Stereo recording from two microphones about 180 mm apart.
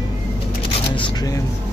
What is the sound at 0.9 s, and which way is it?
Shuffling cards, 25° left (ahead or behind).